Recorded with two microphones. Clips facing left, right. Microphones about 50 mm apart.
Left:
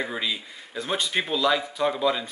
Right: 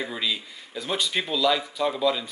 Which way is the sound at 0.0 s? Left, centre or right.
Centre.